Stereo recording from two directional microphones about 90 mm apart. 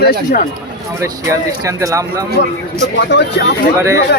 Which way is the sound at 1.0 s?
40° right (ahead or behind).